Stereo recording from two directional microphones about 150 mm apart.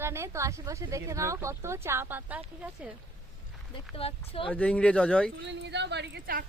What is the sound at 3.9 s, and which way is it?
Speech, 40° left (ahead or behind).